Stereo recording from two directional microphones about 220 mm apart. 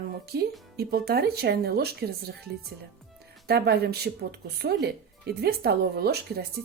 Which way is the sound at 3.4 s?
45° right (ahead or behind).